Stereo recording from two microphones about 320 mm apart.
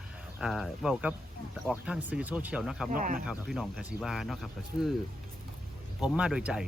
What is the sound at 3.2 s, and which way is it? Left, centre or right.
Speech, centre.